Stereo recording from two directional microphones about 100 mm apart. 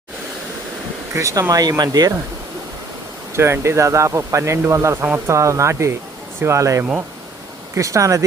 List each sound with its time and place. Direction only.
1.1 s speech: 30° right (ahead or behind)
3.3 s speech: 25° right (ahead or behind)